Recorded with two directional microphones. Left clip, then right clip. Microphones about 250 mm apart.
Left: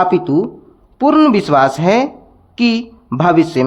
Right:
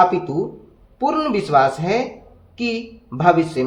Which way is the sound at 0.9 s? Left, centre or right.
Left.